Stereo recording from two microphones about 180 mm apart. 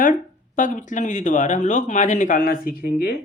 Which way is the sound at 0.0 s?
45° left (ahead or behind).